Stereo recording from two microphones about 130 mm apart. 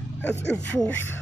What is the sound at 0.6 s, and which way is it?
Speech, 10° left (ahead or behind).